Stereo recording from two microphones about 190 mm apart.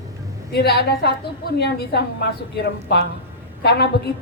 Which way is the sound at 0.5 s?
60° left (ahead or behind).